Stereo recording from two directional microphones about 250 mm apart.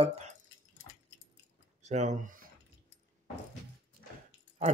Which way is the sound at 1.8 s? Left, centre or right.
Right.